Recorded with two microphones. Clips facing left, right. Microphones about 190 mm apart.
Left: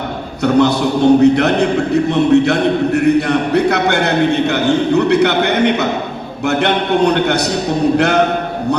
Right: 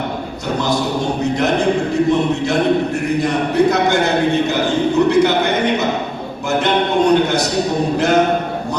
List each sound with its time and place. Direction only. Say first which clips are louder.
0.4 s a man's voice: left 7 dB; 65° left (ahead or behind)